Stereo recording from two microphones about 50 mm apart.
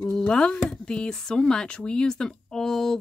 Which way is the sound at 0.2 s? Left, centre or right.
Left.